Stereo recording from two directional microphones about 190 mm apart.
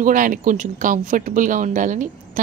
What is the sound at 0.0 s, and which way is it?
A woman's voice, 45° right (ahead or behind).